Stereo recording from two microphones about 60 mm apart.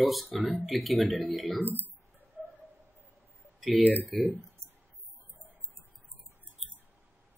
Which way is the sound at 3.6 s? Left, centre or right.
Centre.